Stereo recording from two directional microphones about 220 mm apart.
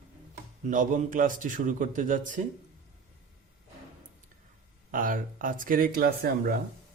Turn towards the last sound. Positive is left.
turn(degrees=-45)  # may be behind; listen again after turning